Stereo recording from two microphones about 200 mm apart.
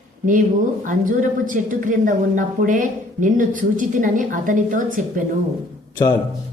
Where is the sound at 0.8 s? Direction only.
40° right (ahead or behind).